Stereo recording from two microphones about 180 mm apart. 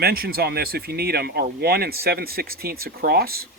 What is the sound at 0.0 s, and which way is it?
Speech, 60° right (ahead or behind).